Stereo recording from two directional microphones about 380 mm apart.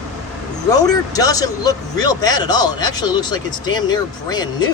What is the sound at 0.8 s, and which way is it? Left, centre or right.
Speech, centre.